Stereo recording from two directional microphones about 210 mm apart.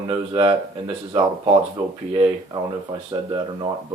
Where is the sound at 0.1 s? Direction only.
25° right (ahead or behind).